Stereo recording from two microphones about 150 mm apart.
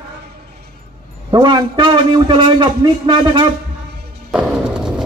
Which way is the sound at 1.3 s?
30° right (ahead or behind).